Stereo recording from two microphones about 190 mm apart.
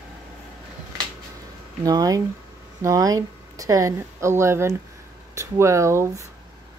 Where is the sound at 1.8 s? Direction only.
20° right (ahead or behind).